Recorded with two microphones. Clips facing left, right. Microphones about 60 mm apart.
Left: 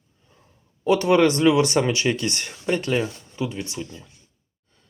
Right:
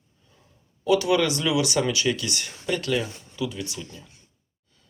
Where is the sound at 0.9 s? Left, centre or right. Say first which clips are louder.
Left 4 dB; left.